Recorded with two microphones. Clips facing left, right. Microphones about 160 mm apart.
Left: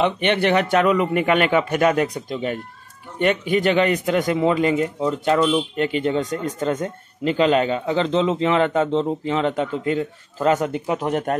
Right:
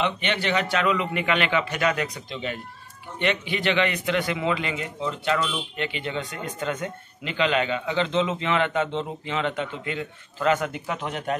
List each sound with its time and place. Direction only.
0.0 s a man's voice: 55° left (ahead or behind)